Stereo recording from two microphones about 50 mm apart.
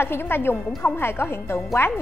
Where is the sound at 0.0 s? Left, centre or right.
Left.